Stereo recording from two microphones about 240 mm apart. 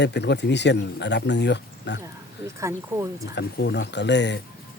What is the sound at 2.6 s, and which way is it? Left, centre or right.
Speech, centre.